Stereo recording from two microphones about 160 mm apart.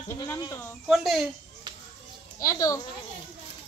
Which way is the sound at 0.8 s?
Centre (ahead or behind).